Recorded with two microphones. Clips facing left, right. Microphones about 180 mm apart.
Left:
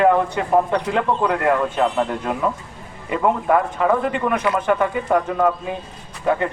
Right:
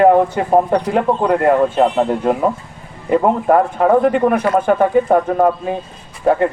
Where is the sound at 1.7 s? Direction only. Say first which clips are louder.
Right 5 dB; 30° right (ahead or behind).